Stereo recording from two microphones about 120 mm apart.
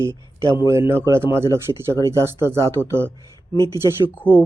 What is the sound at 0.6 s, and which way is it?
Speech, 25° right (ahead or behind).